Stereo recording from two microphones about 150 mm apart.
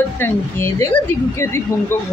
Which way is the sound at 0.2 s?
15° left (ahead or behind).